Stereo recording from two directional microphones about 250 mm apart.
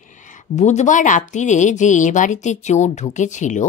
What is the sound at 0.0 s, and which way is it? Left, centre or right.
A woman's voice, left.